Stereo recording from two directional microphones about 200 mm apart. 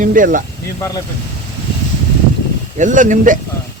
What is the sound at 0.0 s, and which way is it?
Speech, 40° right (ahead or behind).